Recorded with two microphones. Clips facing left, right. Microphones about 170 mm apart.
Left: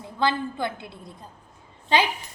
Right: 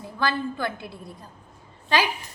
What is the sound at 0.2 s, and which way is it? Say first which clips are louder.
Speech: left 1 dB; 20° left (ahead or behind).